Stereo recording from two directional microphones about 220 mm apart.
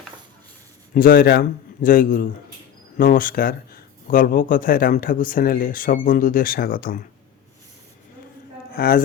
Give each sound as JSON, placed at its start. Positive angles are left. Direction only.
{"t": 0.9, "sound": "speech", "side_deg": 45}
{"t": 8.7, "sound": "speech", "side_deg": 45}